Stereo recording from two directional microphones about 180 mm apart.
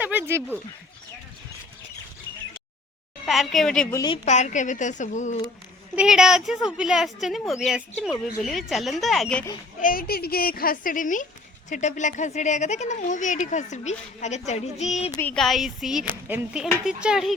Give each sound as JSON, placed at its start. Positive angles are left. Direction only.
{"t": 0.0, "sound": "a sound", "side_deg": -10}
{"t": 3.2, "sound": "a woman's voice", "side_deg": 0}
{"t": 3.9, "sound": "a woman's voice", "side_deg": 25}
{"t": 4.3, "sound": "a woman's voice", "side_deg": 40}
{"t": 6.0, "sound": "a woman's voice", "side_deg": -5}
{"t": 9.8, "sound": "a woman's voice", "side_deg": 55}
{"t": 15.1, "sound": "a woman's voice", "side_deg": 10}